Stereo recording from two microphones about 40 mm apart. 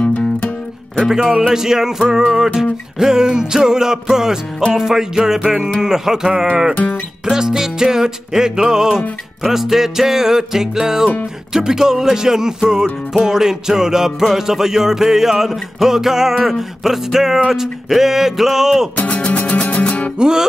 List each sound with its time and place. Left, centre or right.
0.0 s music: left
1.1 s music: centre
6.7 s music: left
7.2 s music: centre
18.9 s music: left
20.2 s music: centre